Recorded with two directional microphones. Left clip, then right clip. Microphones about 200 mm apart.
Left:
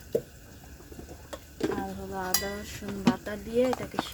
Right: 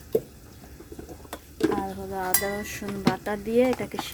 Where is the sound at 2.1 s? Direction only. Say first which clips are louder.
Right 4 dB; 15° right (ahead or behind).